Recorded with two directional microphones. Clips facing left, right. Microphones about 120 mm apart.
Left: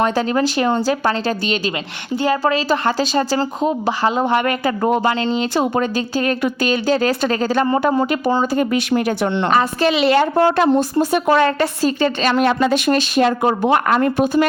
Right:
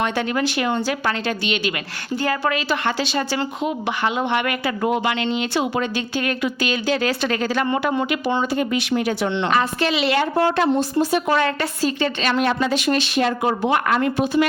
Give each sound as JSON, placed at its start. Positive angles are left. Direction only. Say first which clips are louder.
{"t": 0.0, "sound": "speech", "louder": "left 5 dB", "side_deg": 35}
{"t": 2.1, "sound": "a woman's voice", "louder": "left 5 dB", "side_deg": 25}
{"t": 2.4, "sound": "a woman's voice", "louder": "left 4 dB", "side_deg": 35}